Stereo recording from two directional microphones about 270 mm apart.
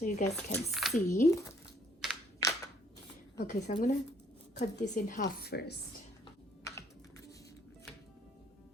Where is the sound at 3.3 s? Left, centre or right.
Left.